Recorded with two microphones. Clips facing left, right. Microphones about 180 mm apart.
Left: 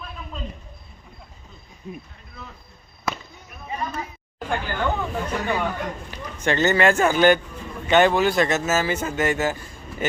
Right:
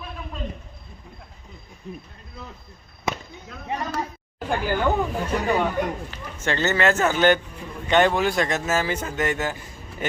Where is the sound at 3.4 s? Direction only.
85° right.